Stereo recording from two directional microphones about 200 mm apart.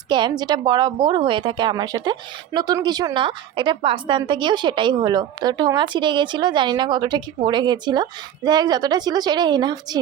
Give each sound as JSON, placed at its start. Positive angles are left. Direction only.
{"t": 0.1, "sound": "a woman's voice", "side_deg": -20}